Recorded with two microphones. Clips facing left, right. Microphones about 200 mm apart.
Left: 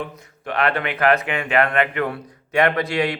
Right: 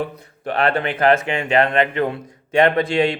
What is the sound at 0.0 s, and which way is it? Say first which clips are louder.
A man's voice: right 5 dB; 35° right (ahead or behind).